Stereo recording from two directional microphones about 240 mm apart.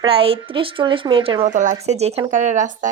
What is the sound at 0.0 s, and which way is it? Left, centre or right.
A woman's voice, right.